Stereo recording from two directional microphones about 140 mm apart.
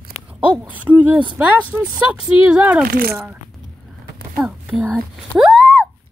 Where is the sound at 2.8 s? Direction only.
90° right.